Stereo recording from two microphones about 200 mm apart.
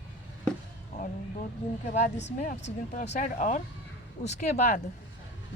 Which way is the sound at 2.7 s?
35° left (ahead or behind).